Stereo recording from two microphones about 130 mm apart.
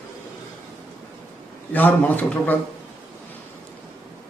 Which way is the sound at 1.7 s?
15° left (ahead or behind).